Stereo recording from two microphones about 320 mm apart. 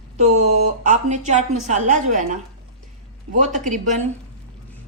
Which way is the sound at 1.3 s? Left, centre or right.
Right.